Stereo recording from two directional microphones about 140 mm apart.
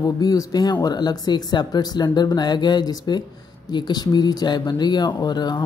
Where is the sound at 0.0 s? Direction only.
25° left (ahead or behind).